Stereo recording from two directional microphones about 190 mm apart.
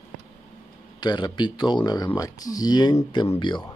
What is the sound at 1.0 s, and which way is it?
Speech, 20° left (ahead or behind).